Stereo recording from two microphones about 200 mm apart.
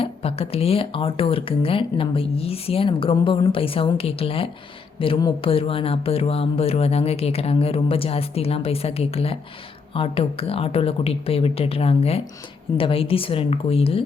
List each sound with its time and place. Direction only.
0.0 s speech: 30° left (ahead or behind)